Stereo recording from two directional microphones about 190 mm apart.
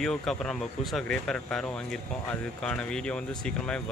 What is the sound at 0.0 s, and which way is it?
Speech, 5° left (ahead or behind).